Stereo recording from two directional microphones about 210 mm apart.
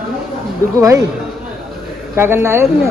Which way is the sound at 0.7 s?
15° right (ahead or behind).